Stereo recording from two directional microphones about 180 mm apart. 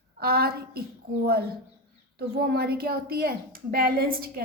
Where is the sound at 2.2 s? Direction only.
60° right (ahead or behind).